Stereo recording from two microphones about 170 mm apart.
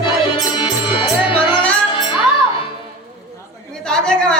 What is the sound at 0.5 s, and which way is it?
Music, 30° left (ahead or behind).